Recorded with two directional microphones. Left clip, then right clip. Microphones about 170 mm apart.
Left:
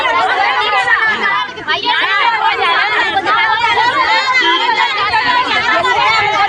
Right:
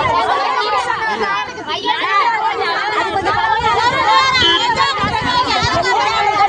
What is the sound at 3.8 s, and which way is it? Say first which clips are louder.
Speech: left 1 dB; 60° right (ahead or behind).